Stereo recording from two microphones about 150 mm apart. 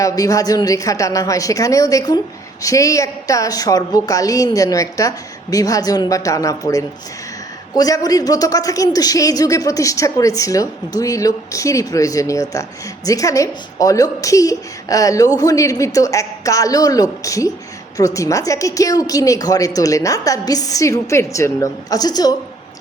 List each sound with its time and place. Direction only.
0.0 s a man's voice: 25° left (ahead or behind)